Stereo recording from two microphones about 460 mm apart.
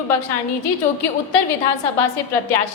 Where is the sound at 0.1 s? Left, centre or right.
Left.